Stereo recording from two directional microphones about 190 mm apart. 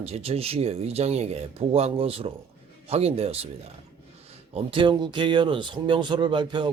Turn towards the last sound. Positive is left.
turn(degrees=-25)  # may be behind; listen again after turning